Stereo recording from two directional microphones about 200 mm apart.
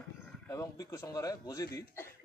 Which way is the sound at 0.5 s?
15° left (ahead or behind).